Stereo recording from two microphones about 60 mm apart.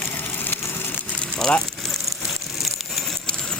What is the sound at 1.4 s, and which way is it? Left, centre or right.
Speech, centre.